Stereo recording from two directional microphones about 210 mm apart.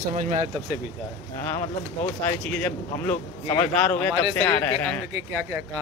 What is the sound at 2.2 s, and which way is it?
Speech, 10° left (ahead or behind).